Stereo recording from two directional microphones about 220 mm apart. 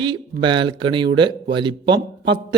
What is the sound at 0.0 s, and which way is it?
Speech, 20° right (ahead or behind).